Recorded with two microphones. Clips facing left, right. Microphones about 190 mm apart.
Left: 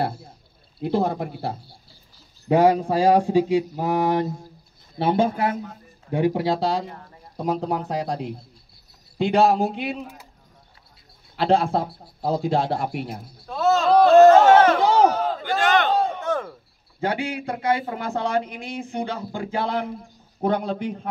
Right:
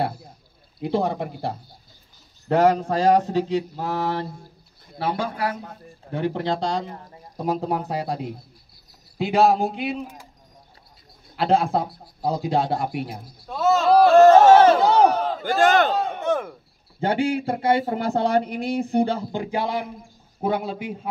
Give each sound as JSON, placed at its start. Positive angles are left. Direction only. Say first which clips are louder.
{"t": 0.7, "sound": "a man's voice", "louder": "left 1 dB", "side_deg": 0}
{"t": 6.1, "sound": "a man's voice", "louder": "left 3 dB", "side_deg": 10}
{"t": 11.3, "sound": "a man's voice", "louder": "even", "side_deg": 0}
{"t": 14.8, "sound": "battle cry", "louder": "right 1 dB", "side_deg": 0}
{"t": 15.4, "sound": "battle cry", "louder": "right 4 dB", "side_deg": -45}
{"t": 17.0, "sound": "speech", "louder": "right 4 dB", "side_deg": -30}
{"t": 19.3, "sound": "a man's voice", "louder": "even", "side_deg": -15}